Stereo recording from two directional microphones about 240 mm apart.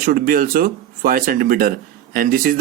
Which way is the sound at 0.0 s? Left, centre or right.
Right.